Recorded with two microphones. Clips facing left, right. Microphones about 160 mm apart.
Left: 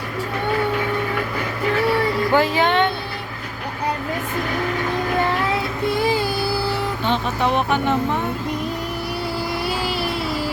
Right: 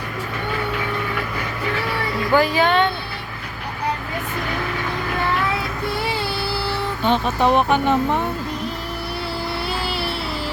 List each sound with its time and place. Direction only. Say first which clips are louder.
2.3 s speech: right 2 dB; 20° left (ahead or behind)
7.0 s speech: right 5 dB; 15° right (ahead or behind)